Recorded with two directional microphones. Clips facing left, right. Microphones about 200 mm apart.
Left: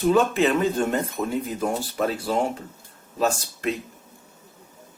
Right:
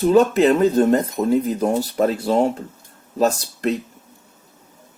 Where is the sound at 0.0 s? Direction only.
40° right (ahead or behind).